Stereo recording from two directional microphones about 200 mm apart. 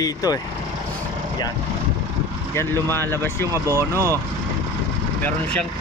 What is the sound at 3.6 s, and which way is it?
Speech, 15° right (ahead or behind).